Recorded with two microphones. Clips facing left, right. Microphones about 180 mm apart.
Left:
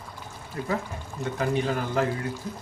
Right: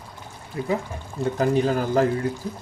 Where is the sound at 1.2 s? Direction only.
40° right (ahead or behind).